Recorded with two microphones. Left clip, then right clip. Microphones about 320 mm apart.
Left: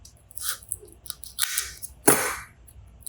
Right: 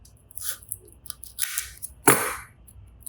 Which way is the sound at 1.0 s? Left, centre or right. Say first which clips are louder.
Left 5 dB; centre.